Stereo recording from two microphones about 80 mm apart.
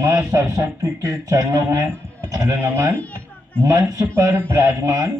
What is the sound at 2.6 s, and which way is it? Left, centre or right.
Speech, right.